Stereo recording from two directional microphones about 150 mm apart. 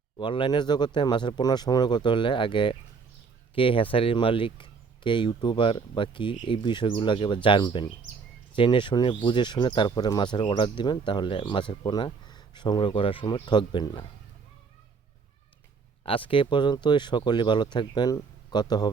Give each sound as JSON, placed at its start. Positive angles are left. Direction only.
{"t": 0.2, "sound": "speech", "side_deg": 35}
{"t": 16.0, "sound": "speech", "side_deg": 35}